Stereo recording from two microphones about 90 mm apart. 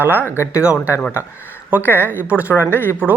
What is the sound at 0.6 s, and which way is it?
A woman's voice, 15° right (ahead or behind).